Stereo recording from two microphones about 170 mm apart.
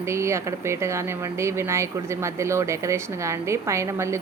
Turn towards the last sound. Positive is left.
turn(degrees=-15)  # may be behind; listen again after turning